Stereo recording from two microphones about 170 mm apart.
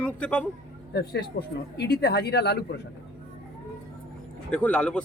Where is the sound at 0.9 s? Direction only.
70° left (ahead or behind).